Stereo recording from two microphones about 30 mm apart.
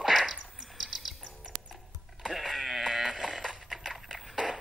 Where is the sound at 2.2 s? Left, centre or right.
Centre.